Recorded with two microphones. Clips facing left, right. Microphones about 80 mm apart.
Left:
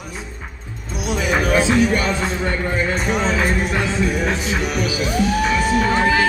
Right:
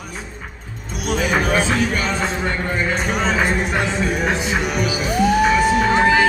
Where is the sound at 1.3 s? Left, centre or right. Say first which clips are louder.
Left 2 dB; centre.